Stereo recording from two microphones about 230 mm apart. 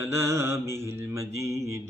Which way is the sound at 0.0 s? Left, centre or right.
Centre.